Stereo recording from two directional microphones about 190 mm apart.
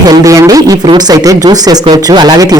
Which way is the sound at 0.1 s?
20° right (ahead or behind).